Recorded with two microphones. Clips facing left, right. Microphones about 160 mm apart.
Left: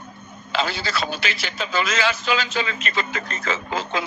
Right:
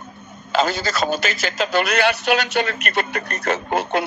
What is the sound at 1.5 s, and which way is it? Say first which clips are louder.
A man's voice: right 5 dB; 80° right.